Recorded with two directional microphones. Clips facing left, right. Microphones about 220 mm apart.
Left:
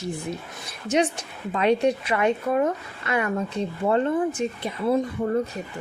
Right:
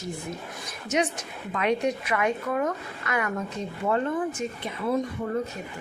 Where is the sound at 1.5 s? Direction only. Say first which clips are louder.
Left 5 dB; 30° left (ahead or behind).